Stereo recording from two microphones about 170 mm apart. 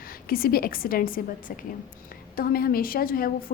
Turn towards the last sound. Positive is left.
turn(degrees=60)  # may be behind; listen again after turning